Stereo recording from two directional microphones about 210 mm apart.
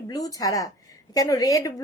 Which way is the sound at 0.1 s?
15° left (ahead or behind).